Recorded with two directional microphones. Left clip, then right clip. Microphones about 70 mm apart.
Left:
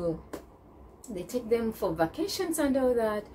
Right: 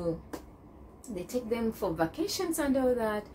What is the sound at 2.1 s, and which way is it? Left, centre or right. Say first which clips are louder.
A woman's voice: left 1 dB; left.